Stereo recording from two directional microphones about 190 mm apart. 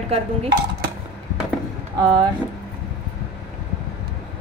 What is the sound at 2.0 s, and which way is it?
Speech, 25° right (ahead or behind).